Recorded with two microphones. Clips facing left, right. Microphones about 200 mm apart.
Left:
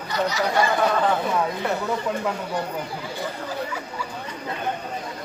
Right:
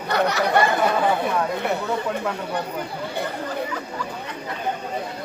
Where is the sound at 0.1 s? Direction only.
60° right (ahead or behind).